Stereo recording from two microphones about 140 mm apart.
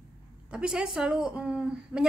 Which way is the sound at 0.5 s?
5° right (ahead or behind).